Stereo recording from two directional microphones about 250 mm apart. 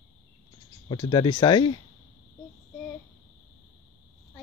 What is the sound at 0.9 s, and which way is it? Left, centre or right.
Speech, centre.